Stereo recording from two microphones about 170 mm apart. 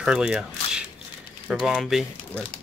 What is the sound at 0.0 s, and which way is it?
Speech, 5° right (ahead or behind).